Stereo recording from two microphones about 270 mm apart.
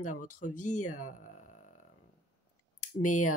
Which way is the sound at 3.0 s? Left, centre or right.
Left.